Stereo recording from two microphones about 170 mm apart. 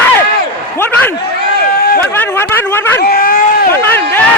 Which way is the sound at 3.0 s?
60° left (ahead or behind).